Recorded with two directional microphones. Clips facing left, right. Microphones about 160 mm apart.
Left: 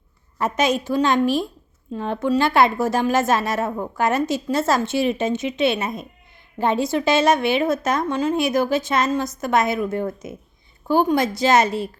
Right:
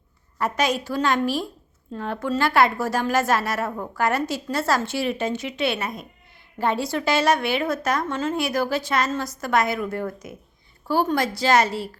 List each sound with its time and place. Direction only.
0.3 s a woman's voice: 20° left (ahead or behind)